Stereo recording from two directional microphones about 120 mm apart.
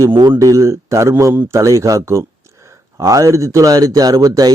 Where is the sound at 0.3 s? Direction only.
25° right (ahead or behind).